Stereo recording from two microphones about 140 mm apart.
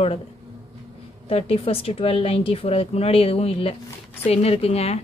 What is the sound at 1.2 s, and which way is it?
Speech, 45° left (ahead or behind).